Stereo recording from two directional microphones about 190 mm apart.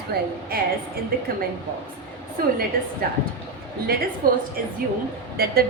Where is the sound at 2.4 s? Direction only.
50° right (ahead or behind).